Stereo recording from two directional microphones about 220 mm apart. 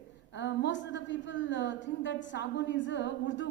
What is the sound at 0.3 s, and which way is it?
A woman's voice, 55° left (ahead or behind).